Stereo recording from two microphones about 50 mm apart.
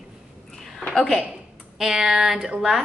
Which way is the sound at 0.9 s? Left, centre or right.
Centre.